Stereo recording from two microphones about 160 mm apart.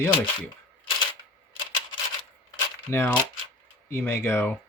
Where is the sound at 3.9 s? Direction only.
15° left (ahead or behind).